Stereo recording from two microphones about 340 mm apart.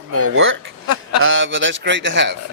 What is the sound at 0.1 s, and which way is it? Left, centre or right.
A man's voice, right.